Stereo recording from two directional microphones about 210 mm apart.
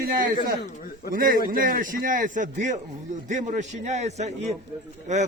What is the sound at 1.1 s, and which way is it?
A man's voice, 40° right (ahead or behind).